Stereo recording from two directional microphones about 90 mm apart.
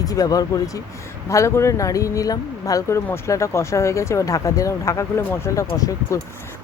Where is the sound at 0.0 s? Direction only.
45° left (ahead or behind).